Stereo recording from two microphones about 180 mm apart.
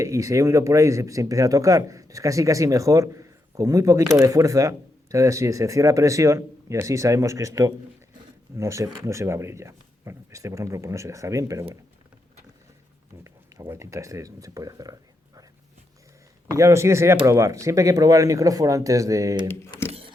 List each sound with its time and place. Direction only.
0.0 s speech: 15° right (ahead or behind)
13.2 s speech: 15° right (ahead or behind)
16.6 s speech: 15° right (ahead or behind)
19.9 s a sound: 30° right (ahead or behind)